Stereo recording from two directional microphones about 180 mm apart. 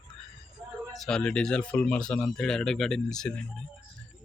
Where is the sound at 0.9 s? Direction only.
Centre (ahead or behind).